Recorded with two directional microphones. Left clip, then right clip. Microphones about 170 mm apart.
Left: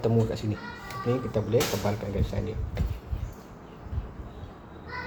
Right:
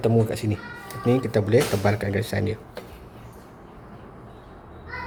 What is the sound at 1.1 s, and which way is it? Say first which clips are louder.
Speech: right 6 dB; 50° right (ahead or behind).